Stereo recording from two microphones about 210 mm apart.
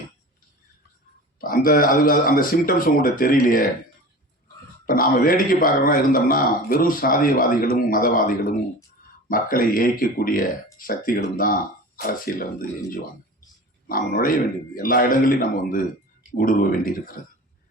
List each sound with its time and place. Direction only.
1.4 s speech: 40° left (ahead or behind)
4.9 s a man's voice: 40° left (ahead or behind)
13.8 s a man's voice: 45° left (ahead or behind)